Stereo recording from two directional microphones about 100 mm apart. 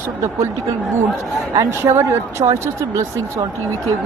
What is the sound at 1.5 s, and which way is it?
Speech, 30° right (ahead or behind).